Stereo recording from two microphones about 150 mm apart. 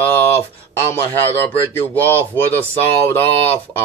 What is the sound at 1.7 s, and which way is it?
Speech, 15° left (ahead or behind).